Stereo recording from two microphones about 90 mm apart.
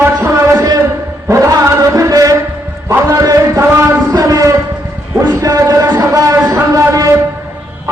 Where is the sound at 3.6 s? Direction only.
25° right (ahead or behind).